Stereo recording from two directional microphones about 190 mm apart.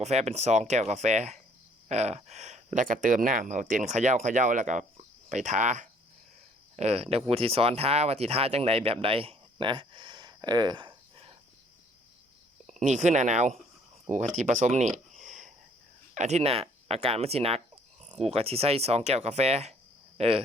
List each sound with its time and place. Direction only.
0.0 s speech: 35° right (ahead or behind)
12.6 s speech: 40° right (ahead or behind)